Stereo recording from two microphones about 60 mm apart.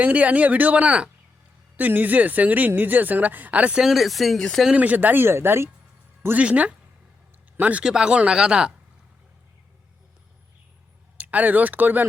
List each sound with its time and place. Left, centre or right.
0.0 s speech: right
3.8 s speech: centre
4.7 s speech: right
6.3 s speech: right
7.9 s speech: centre
11.2 s speech: right